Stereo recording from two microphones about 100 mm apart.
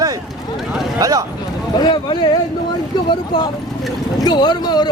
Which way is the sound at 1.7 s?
50° left (ahead or behind).